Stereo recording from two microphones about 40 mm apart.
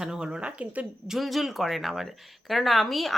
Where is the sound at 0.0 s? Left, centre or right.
Centre; by 0.9 s right.